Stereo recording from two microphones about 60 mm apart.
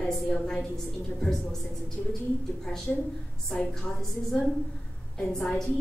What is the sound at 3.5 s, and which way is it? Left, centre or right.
A woman's voice, centre.